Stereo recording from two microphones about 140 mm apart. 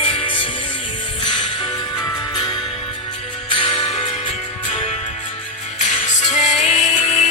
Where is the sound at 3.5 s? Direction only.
40° left (ahead or behind).